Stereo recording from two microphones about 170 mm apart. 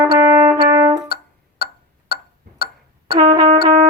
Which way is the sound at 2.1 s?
65° left (ahead or behind).